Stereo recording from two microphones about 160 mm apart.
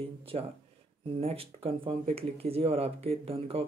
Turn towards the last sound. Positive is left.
turn(degrees=-35)  # may be behind; listen again after turning